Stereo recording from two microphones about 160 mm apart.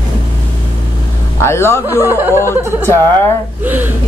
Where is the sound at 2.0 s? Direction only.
15° right (ahead or behind).